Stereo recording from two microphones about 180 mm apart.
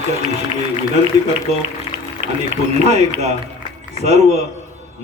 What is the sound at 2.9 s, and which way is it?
A man's voice, 40° right (ahead or behind).